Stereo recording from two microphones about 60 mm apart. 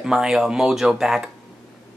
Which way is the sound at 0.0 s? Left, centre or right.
Centre.